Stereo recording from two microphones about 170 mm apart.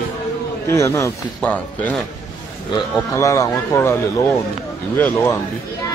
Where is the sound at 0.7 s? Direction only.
15° left (ahead or behind).